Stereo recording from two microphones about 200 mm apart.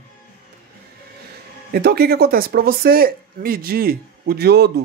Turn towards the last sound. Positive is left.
turn(degrees=-55)  # may be behind; listen again after turning